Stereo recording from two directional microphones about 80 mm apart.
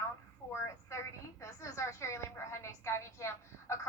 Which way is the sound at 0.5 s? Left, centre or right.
Left.